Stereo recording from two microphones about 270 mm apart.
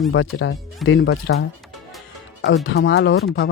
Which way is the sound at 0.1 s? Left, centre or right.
Left.